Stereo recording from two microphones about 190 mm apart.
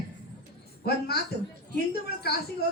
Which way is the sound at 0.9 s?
55° left (ahead or behind).